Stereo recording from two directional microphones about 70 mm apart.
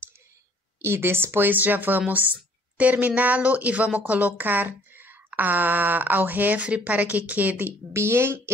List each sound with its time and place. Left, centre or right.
0.8 s speech: right
7.9 s a woman's voice: right